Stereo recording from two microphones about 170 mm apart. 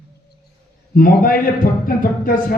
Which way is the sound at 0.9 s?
55° left (ahead or behind).